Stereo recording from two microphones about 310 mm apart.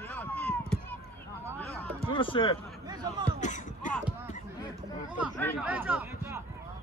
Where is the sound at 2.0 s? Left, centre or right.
Centre.